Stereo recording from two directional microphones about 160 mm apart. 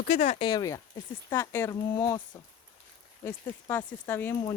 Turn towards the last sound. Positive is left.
turn(degrees=15)  # may be behind; listen again after turning